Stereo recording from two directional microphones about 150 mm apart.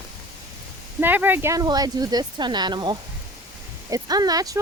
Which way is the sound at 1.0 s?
10° right (ahead or behind).